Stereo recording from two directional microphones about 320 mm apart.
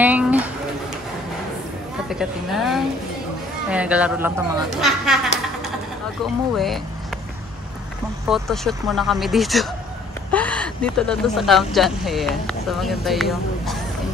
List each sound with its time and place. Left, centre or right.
0.0 s a sound: centre
2.0 s speech: centre
6.5 s speech: centre
8.3 s speech: centre